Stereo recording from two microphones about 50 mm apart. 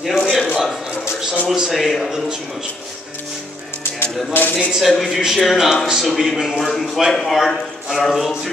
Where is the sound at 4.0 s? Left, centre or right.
Left.